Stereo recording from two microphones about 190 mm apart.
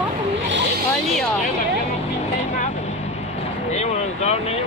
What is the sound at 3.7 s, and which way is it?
Vehicle, 35° left (ahead or behind).